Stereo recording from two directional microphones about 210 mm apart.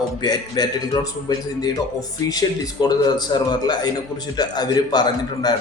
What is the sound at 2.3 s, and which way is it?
A man's voice, 20° left (ahead or behind).